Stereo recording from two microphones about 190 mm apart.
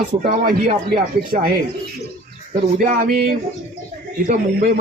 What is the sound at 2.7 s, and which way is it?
Speech, 50° right (ahead or behind).